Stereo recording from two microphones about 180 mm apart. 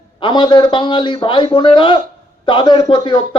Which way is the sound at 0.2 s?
25° left (ahead or behind).